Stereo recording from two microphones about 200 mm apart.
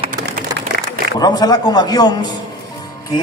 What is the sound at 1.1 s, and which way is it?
A man's voice, 20° left (ahead or behind).